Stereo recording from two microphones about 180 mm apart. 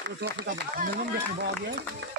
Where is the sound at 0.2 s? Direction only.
75° right (ahead or behind).